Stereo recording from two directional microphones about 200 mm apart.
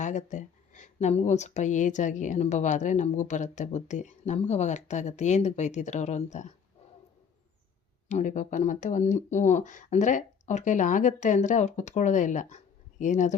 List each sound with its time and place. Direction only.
0.0 s speech: 35° left (ahead or behind)
8.0 s speech: 40° left (ahead or behind)